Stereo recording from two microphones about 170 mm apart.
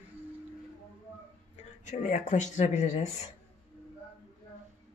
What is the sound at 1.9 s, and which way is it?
Speech, 50° left (ahead or behind).